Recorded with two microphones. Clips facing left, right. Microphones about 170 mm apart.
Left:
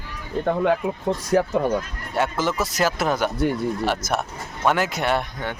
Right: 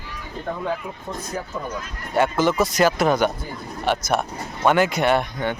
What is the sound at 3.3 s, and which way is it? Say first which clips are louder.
Speech: left 12 dB; 70° left (ahead or behind).